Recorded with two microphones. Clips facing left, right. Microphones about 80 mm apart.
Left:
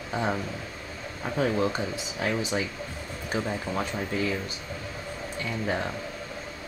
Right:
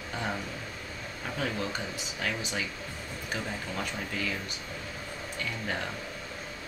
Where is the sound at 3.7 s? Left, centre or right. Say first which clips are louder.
Left 5 dB; left.